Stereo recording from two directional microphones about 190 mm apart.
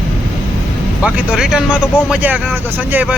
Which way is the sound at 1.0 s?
5° right (ahead or behind).